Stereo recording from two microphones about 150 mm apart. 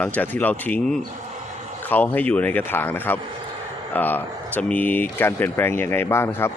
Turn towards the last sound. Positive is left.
turn(degrees=15)  # may be behind; listen again after turning